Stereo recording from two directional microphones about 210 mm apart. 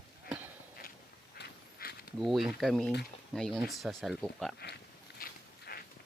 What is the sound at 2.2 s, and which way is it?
Speech, centre (ahead or behind).